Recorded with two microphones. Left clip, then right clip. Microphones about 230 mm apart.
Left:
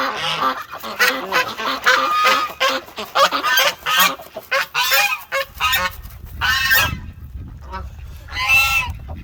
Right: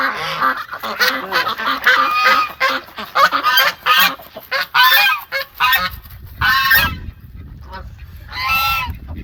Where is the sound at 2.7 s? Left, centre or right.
Left.